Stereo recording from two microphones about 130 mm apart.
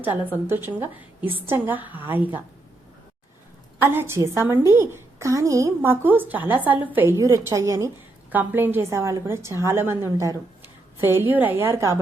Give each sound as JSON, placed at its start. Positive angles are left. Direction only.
{"t": 0.4, "sound": "a woman's voice", "side_deg": -15}
{"t": 3.8, "sound": "a woman's voice", "side_deg": -15}
{"t": 8.3, "sound": "a woman's voice", "side_deg": -15}